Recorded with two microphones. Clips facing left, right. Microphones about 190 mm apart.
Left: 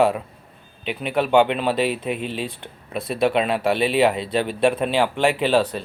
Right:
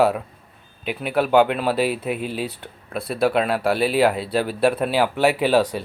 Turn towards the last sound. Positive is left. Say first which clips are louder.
# right 1 dB
turn(degrees=-10)  # may be behind; listen again after turning